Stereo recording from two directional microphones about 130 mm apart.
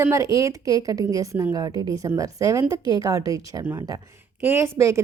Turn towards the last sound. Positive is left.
turn(degrees=-20)  # may be behind; listen again after turning